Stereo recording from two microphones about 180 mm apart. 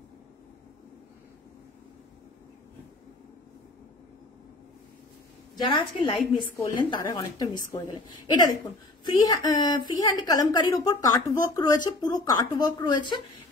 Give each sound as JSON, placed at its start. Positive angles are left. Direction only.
{"t": 5.6, "sound": "a woman's voice", "side_deg": 25}
{"t": 9.0, "sound": "a woman's voice", "side_deg": 25}